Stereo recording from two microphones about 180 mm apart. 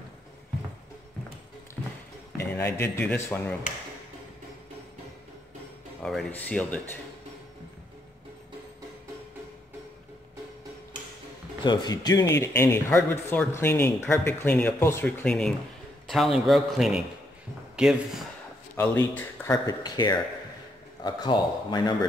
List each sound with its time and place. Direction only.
2.5 s speech: 15° left (ahead or behind)
6.0 s speech: 5° left (ahead or behind)
11.6 s a man's voice: 25° left (ahead or behind); by 18.2 s 5° right (ahead or behind)
18.8 s speech: 10° left (ahead or behind)